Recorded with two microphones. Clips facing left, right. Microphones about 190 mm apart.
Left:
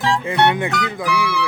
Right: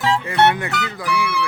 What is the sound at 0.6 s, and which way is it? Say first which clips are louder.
Speech: left 4 dB; 20° left (ahead or behind).